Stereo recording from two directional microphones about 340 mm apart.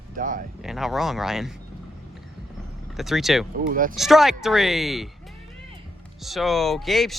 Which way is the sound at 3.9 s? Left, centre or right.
Centre.